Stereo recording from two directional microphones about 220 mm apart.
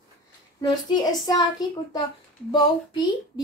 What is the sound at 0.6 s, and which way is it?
A woman's voice, 20° left (ahead or behind).